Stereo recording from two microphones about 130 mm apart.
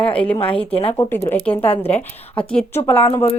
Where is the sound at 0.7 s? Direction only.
50° left (ahead or behind).